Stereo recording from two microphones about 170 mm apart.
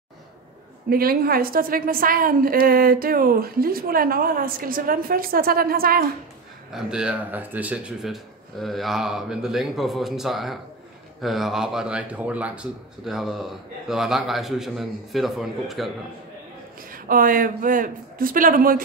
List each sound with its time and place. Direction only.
0.8 s a woman's voice: 60° right (ahead or behind)
6.7 s speech: 5° right (ahead or behind)
16.9 s a woman's voice: 55° right (ahead or behind)